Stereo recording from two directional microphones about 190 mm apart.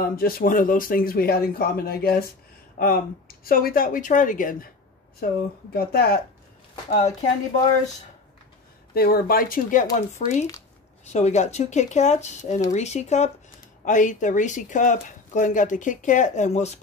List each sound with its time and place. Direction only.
0.0 s speech: 50° left (ahead or behind)
3.4 s speech: 50° left (ahead or behind)
6.9 s speech: 35° left (ahead or behind)
8.9 s speech: 50° left (ahead or behind); by 16.7 s 35° left (ahead or behind)